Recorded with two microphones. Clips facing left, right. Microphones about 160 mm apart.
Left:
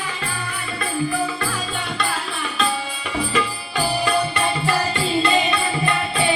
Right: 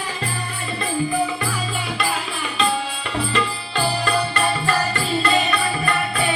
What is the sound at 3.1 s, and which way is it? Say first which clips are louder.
Music: even; 10° left (ahead or behind).